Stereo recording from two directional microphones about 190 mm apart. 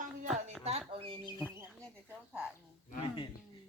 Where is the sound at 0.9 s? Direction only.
30° right (ahead or behind).